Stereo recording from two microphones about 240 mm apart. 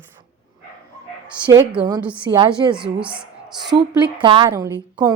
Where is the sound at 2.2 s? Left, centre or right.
Centre.